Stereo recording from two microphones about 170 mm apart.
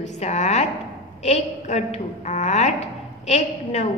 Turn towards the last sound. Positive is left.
turn(degrees=40)  # may be behind; listen again after turning